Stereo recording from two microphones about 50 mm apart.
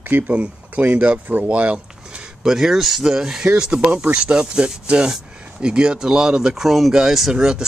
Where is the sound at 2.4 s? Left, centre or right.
Centre.